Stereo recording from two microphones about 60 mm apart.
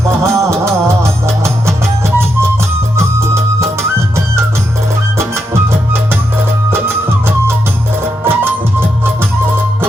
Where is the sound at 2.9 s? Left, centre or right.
Right.